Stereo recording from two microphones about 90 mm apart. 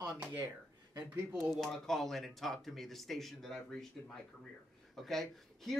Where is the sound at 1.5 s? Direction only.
5° left (ahead or behind).